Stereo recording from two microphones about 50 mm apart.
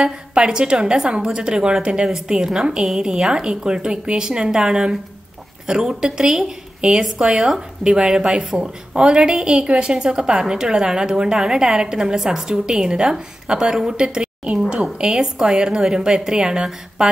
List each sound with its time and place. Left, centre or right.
0.0 s a woman's voice: centre